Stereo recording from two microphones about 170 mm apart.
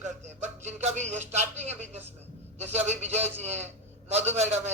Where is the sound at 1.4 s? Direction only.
40° right (ahead or behind).